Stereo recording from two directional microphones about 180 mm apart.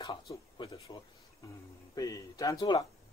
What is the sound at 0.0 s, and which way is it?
Speech, 25° left (ahead or behind).